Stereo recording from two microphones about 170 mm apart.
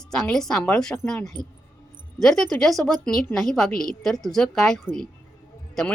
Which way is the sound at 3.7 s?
55° left (ahead or behind).